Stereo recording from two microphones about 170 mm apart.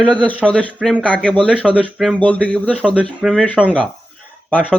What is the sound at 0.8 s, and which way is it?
Speech, 5° right (ahead or behind).